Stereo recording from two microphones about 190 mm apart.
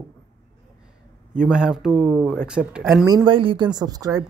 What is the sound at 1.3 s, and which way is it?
Speech, 5° right (ahead or behind).